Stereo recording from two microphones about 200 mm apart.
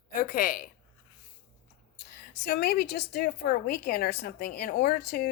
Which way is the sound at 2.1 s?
55° left (ahead or behind).